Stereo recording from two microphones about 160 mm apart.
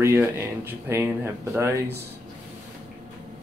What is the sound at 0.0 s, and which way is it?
Speech, 15° right (ahead or behind).